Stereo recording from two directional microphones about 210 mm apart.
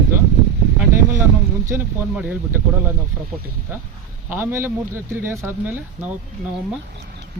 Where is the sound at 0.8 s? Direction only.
10° right (ahead or behind).